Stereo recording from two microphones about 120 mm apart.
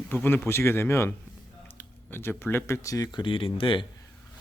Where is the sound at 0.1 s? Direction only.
15° left (ahead or behind).